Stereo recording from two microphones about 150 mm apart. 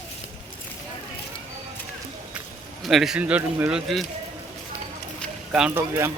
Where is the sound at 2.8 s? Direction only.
Centre (ahead or behind).